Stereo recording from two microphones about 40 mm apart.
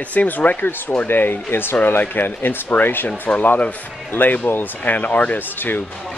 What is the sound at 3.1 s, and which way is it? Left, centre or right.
Speech, left.